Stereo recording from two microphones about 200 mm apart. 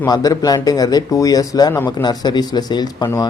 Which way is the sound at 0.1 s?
20° left (ahead or behind).